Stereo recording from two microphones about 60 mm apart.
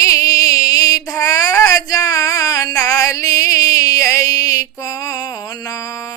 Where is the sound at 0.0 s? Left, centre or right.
Left.